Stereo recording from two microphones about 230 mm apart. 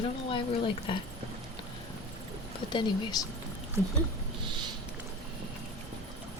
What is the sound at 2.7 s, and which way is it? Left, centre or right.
Speech, centre.